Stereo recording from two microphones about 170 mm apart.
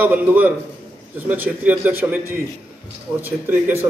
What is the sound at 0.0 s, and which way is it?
A man's voice, 10° right (ahead or behind).